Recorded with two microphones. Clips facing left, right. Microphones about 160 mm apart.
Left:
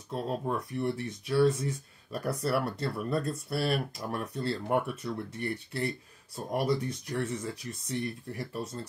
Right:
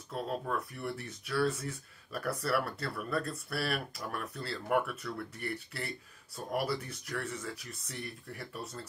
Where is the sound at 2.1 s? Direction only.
25° left (ahead or behind).